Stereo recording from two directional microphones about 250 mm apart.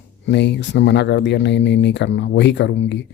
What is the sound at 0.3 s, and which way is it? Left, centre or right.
Speech, left.